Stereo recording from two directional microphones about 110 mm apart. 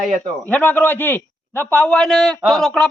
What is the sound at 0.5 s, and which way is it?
A man's voice, 15° left (ahead or behind).